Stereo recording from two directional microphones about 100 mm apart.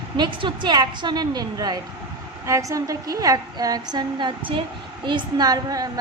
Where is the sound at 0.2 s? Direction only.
50° right (ahead or behind).